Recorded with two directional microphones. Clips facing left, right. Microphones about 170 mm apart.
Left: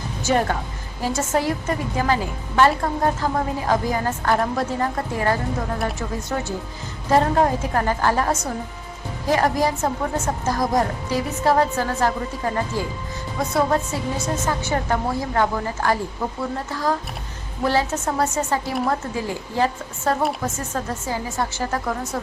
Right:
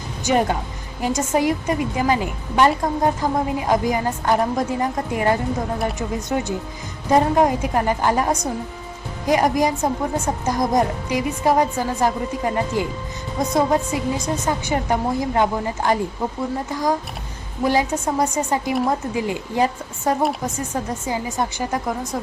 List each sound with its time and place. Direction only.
0.3 s speech: 15° right (ahead or behind)